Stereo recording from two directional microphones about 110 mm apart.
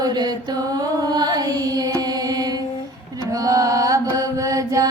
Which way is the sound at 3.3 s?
30° right (ahead or behind).